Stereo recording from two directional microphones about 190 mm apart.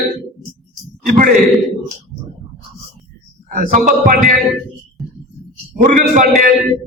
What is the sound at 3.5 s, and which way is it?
Speech, 45° right (ahead or behind).